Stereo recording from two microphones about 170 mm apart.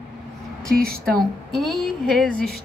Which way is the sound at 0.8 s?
65° right (ahead or behind).